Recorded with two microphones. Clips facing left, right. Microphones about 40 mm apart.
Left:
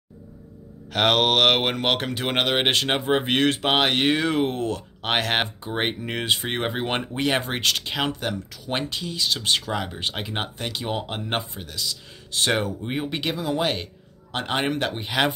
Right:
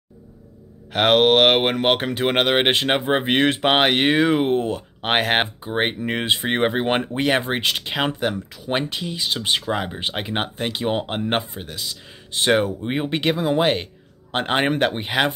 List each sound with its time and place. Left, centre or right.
0.9 s speech: centre
5.6 s speech: centre
13.1 s speech: right